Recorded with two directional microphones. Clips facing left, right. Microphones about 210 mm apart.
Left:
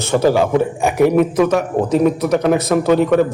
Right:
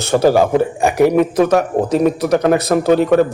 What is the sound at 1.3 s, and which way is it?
A man's voice, 35° right (ahead or behind).